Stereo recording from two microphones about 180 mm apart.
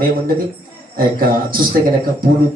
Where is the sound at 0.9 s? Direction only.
55° right (ahead or behind).